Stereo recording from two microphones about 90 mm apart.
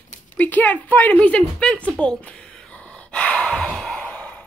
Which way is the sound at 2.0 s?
10° left (ahead or behind).